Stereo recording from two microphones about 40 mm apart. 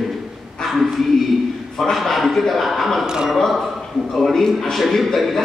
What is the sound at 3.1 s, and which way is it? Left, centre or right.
Speech, centre.